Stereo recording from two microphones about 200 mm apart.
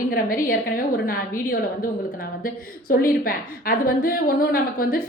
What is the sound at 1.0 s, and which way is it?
Speech, 45° left (ahead or behind).